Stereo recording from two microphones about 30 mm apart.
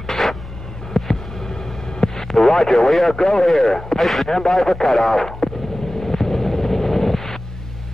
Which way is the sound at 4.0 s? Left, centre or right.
Centre.